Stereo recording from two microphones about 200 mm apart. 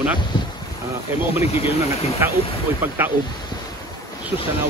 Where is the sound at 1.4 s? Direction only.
30° left (ahead or behind).